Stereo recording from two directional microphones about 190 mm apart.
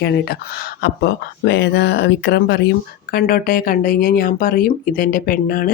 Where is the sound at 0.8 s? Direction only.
60° left (ahead or behind).